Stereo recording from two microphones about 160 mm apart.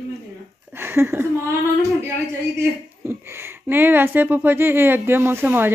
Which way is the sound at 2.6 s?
15° right (ahead or behind).